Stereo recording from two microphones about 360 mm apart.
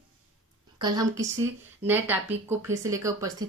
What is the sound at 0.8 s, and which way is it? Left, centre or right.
Speech, centre.